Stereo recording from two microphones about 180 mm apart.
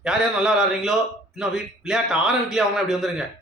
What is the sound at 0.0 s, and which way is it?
A man's voice, 5° right (ahead or behind).